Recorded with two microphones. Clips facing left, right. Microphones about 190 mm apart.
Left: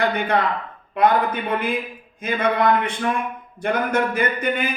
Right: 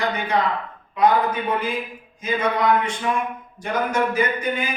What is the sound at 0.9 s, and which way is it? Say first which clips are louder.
Speech: even; 55° left (ahead or behind).